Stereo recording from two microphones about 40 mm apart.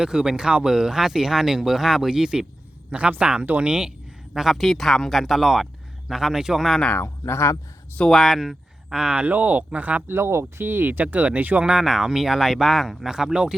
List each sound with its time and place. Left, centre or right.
0.0 s speech: centre
3.2 s speech: right
4.4 s a man's voice: centre
7.0 s speech: left
8.1 s a man's voice: centre
8.9 s speech: right
9.2 s speech: right
10.1 s speech: right
10.6 s speech: right
11.8 s speech: centre
13.1 s speech: centre